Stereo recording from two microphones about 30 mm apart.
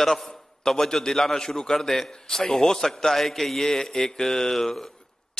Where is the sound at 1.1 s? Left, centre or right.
Centre.